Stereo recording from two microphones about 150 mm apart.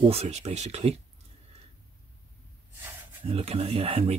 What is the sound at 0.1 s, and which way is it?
Speech, 45° right (ahead or behind).